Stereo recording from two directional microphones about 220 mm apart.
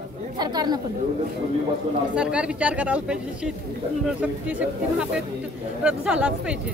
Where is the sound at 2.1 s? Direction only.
5° right (ahead or behind).